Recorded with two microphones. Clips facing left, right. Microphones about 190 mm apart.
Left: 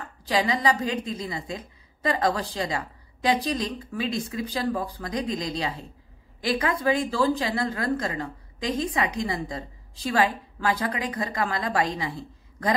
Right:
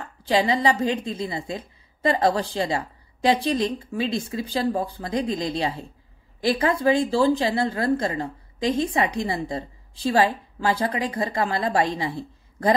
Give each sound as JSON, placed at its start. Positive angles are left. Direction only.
{"t": 0.2, "sound": "a woman's voice", "side_deg": -30}